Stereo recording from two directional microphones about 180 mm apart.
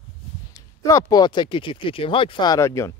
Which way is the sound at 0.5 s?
20° left (ahead or behind).